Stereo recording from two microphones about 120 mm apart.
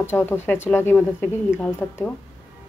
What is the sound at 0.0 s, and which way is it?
Speech, 20° left (ahead or behind).